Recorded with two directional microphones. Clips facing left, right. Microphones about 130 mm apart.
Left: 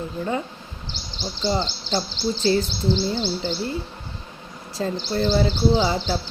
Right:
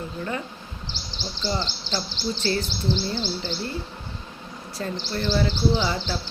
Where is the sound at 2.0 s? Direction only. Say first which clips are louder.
Left 4 dB; 25° left (ahead or behind).